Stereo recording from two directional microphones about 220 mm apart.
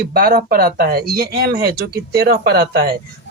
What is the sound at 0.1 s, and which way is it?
Speech, 45° right (ahead or behind).